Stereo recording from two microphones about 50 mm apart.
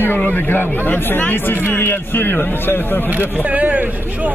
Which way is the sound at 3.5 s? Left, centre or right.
Right.